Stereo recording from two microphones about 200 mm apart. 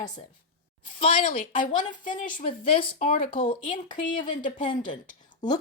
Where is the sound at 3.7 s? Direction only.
40° left (ahead or behind).